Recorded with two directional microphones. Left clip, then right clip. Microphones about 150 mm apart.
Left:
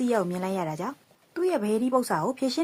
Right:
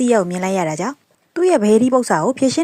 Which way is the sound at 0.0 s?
30° right (ahead or behind).